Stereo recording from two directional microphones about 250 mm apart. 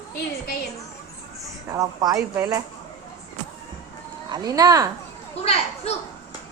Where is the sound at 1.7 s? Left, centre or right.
Centre.